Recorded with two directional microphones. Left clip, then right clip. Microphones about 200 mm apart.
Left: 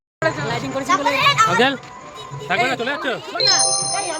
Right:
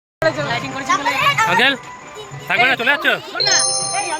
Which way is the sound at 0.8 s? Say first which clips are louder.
Even; 35° left (ahead or behind).